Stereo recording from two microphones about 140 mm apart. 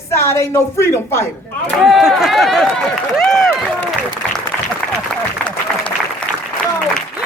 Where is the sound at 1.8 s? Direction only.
Centre (ahead or behind).